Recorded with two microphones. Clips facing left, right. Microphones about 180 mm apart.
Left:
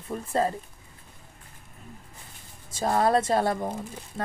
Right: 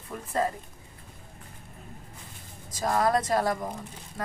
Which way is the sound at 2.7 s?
25° left (ahead or behind).